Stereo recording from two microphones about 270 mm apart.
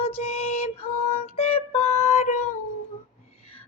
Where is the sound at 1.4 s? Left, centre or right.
Left.